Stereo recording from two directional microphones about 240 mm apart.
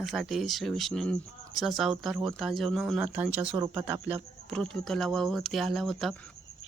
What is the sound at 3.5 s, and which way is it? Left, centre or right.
Speech, right.